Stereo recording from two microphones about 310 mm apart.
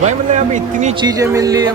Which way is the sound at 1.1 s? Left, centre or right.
Centre.